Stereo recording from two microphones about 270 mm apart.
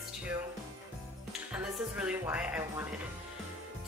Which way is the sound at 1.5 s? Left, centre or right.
Centre.